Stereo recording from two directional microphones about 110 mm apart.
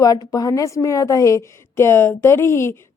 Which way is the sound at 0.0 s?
35° left (ahead or behind).